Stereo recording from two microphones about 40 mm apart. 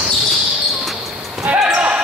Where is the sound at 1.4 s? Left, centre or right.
Right.